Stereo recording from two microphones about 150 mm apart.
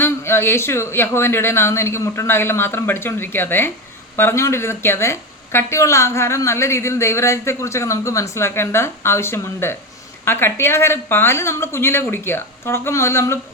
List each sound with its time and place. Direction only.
0.0 s speech: 15° left (ahead or behind)